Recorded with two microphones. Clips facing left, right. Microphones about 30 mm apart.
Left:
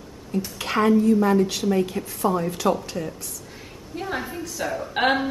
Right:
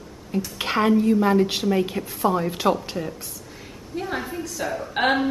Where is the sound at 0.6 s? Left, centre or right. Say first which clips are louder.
Even; centre.